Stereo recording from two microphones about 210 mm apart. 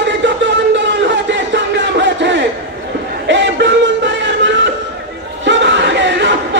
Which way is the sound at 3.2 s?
60° right (ahead or behind).